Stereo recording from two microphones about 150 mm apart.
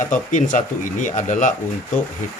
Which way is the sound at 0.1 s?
60° left (ahead or behind).